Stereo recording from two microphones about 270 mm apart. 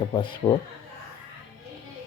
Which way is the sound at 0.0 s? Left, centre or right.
Centre.